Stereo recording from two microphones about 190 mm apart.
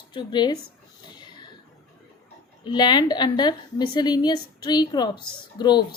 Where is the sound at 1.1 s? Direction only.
25° left (ahead or behind).